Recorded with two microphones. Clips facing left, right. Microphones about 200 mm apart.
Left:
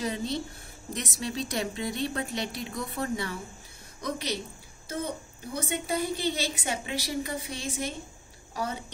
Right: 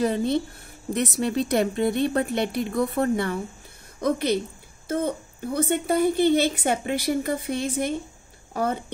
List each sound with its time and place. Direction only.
0.0 s a woman's voice: 55° right (ahead or behind)